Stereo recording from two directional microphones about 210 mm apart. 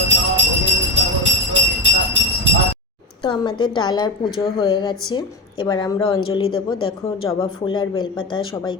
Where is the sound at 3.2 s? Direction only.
20° left (ahead or behind).